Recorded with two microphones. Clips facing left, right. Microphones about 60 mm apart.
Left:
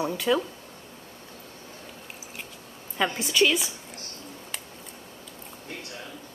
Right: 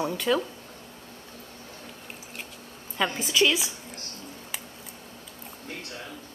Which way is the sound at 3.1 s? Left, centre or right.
Centre.